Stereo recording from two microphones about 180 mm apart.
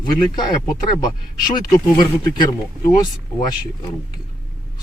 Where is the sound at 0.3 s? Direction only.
20° left (ahead or behind).